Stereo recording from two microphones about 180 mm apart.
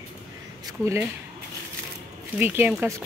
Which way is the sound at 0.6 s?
15° right (ahead or behind).